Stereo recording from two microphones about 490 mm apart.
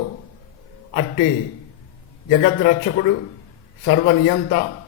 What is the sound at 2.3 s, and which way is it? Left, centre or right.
A man's voice, left.